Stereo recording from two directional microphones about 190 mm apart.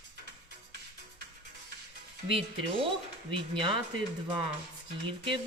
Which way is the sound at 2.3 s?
30° right (ahead or behind).